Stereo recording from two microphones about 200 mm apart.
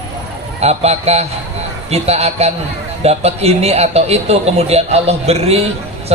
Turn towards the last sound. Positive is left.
turn(degrees=-30)  # may be behind; listen again after turning